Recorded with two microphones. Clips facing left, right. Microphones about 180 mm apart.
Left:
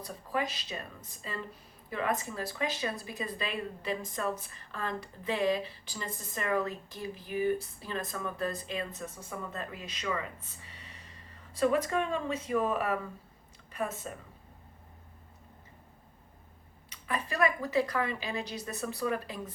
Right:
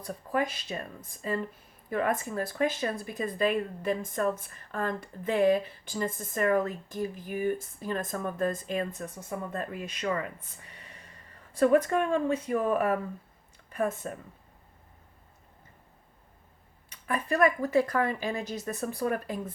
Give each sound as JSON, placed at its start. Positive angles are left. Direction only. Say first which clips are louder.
{"t": 0.0, "sound": "speech", "louder": "right 4 dB", "side_deg": -50}
{"t": 16.9, "sound": "speech", "louder": "right 5 dB", "side_deg": -50}